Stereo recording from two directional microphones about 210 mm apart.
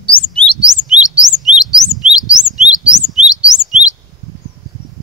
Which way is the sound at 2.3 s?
5° right (ahead or behind).